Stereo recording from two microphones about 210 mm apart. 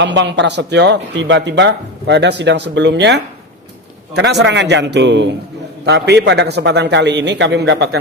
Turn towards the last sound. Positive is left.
turn(degrees=-55)  # may be behind; listen again after turning